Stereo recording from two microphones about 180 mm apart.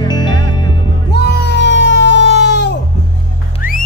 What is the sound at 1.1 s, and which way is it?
Music, 70° left (ahead or behind).